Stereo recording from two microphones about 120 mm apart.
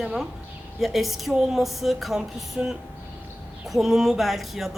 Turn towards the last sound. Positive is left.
turn(degrees=0)  # may be behind; listen again after turning